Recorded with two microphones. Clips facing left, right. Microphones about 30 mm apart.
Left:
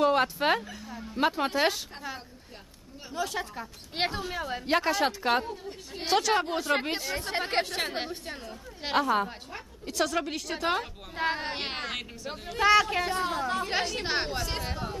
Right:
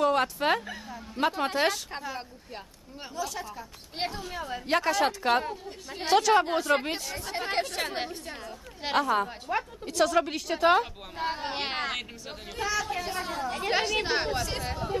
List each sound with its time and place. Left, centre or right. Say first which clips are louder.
0.0 s a woman's voice: left 1 dB; centre
3.2 s a woman's voice: left 3 dB; left
4.2 s speech: left 2 dB; left
4.7 s a woman's voice: right 1 dB; centre
7.2 s speech: left 3 dB; left
7.6 s speech: even; centre
7.9 s a woman's voice: even; centre
11.2 s speech: left 3 dB; left
11.4 s a woman's voice: right 2 dB; centre
12.6 s speech: left 8 dB; left
13.2 s speech: left 3 dB; centre
13.7 s a woman's voice: right 3 dB; centre